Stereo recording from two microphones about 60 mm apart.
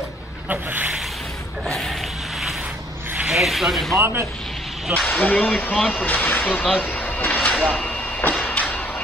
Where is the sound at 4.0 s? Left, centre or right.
Right.